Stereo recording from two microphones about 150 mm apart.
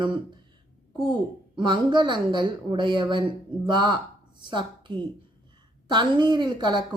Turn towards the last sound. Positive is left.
turn(degrees=-30)  # may be behind; listen again after turning